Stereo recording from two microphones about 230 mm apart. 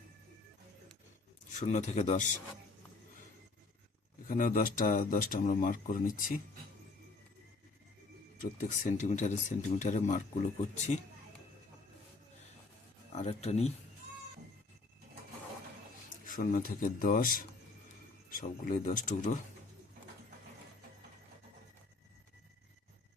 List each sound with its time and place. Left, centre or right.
1.5 s speech: left
4.3 s speech: left
8.4 s speech: left
13.1 s speech: left
16.2 s speech: left